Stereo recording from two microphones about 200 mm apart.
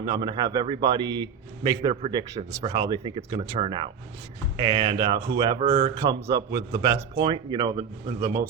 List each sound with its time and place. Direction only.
0.0 s a man's voice: 20° right (ahead or behind)
6.1 s a man's voice: 15° right (ahead or behind)